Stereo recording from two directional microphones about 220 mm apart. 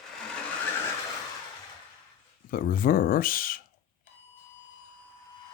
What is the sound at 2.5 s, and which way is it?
Speech, 40° left (ahead or behind).